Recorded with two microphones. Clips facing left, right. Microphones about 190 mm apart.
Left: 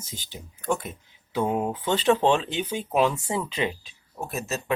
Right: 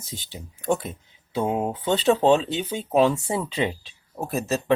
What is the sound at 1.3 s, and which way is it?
Speech, 20° right (ahead or behind).